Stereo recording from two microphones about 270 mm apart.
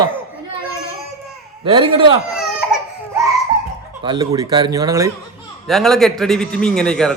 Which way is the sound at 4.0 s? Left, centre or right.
Centre.